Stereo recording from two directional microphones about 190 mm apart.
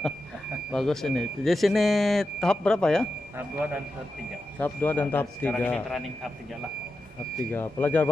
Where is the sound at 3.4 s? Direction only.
10° right (ahead or behind).